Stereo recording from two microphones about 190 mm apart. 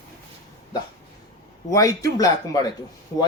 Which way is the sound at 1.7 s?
15° left (ahead or behind).